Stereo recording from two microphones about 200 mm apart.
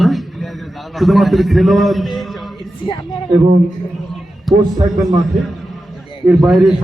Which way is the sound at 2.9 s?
25° left (ahead or behind).